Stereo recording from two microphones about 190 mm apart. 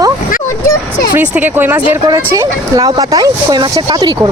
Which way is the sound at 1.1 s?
10° right (ahead or behind).